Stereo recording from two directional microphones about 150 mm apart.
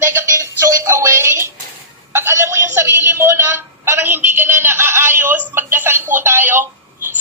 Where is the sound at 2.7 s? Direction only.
15° right (ahead or behind).